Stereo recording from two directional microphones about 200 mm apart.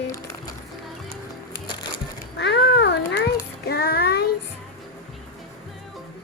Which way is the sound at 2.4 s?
55° left (ahead or behind).